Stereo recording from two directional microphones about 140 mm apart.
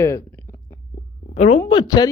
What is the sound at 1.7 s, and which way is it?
Speech, 30° left (ahead or behind).